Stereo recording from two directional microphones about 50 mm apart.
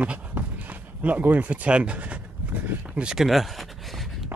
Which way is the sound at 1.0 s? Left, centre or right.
Right.